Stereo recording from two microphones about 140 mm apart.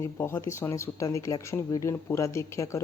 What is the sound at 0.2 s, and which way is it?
Speech, 15° left (ahead or behind).